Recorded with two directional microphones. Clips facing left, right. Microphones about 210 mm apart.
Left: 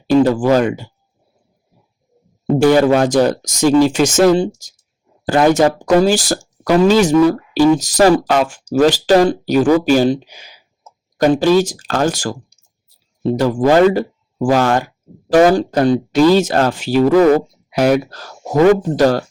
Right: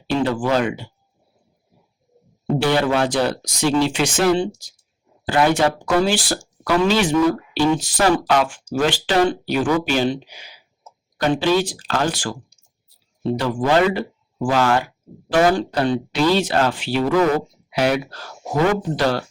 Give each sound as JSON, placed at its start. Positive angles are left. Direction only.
{"t": 0.1, "sound": "speech", "side_deg": 40}
{"t": 2.6, "sound": "speech", "side_deg": 45}